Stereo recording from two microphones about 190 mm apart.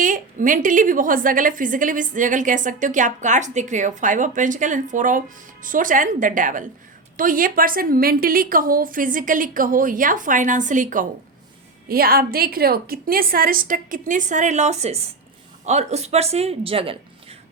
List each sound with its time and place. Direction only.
0.0 s a woman's voice: 45° right (ahead or behind); by 17.3 s 30° right (ahead or behind)